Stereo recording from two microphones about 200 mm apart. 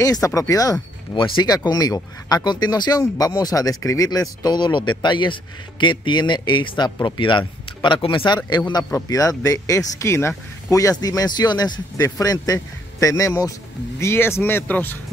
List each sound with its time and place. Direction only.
0.0 s speech: 15° left (ahead or behind)